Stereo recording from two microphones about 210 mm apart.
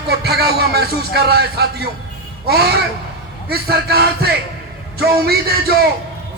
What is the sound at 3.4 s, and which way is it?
A man's voice, 50° right (ahead or behind).